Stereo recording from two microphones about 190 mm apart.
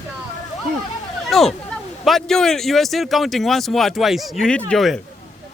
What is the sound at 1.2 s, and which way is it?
Speech, centre (ahead or behind).